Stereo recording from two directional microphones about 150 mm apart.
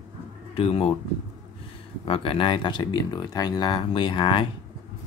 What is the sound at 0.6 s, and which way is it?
Speech, 40° left (ahead or behind).